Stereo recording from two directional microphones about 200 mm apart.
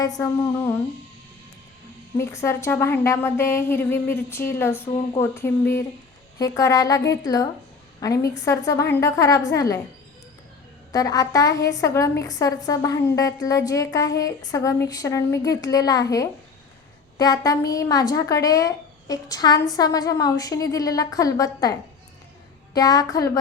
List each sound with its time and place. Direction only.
0.0 s speech: 15° left (ahead or behind)
2.1 s speech: 15° left (ahead or behind)
10.9 s speech: 15° left (ahead or behind)